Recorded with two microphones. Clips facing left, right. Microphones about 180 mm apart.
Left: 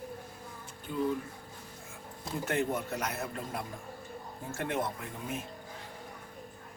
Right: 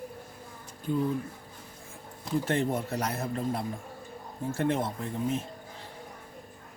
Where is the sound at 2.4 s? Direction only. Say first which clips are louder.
Even; 30° right (ahead or behind).